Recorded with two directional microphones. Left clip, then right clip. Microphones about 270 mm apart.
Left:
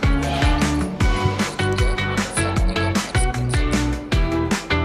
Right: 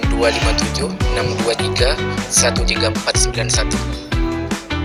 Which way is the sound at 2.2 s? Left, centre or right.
Centre.